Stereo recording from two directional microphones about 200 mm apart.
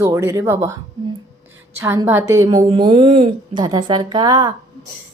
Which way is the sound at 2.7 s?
25° right (ahead or behind).